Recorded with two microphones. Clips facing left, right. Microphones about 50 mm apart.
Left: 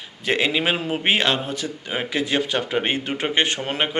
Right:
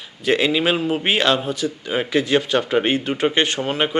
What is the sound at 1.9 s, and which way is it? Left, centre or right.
A man's voice, centre.